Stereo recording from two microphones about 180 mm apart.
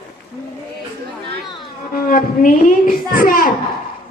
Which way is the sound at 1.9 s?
55° left (ahead or behind).